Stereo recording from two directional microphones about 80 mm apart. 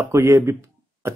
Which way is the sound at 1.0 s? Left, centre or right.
Right.